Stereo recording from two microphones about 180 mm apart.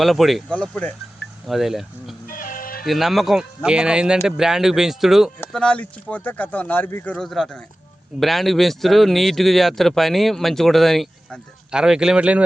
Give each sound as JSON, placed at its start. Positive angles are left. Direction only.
{"t": 0.0, "sound": "speech", "side_deg": 0}
{"t": 2.2, "sound": "music", "side_deg": 50}
{"t": 2.8, "sound": "speech", "side_deg": 0}